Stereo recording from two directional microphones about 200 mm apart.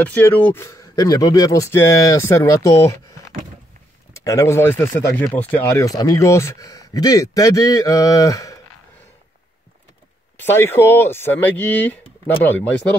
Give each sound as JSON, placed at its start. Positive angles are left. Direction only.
{"t": 0.0, "sound": "speech", "side_deg": 10}
{"t": 4.1, "sound": "speech", "side_deg": 15}
{"t": 10.4, "sound": "speech", "side_deg": 10}